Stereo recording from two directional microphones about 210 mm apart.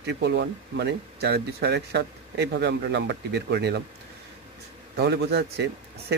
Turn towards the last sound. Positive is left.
turn(degrees=-50)  # may be behind; listen again after turning